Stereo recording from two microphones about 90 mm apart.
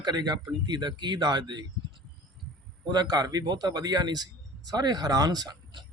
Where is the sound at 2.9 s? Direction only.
50° right (ahead or behind).